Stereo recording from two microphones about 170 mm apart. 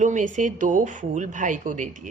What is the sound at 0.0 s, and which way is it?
Speech, 50° right (ahead or behind).